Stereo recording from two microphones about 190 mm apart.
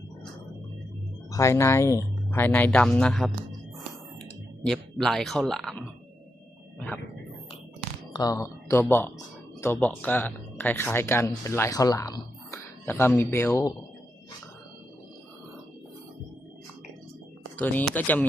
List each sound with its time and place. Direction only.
1.3 s speech: 15° left (ahead or behind)
4.6 s speech: centre (ahead or behind)
6.7 s speech: 10° left (ahead or behind)
8.1 s speech: 20° left (ahead or behind)
17.6 s speech: 10° left (ahead or behind)